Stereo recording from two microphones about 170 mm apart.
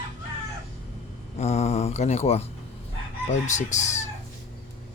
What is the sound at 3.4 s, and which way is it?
Chicken, 45° left (ahead or behind).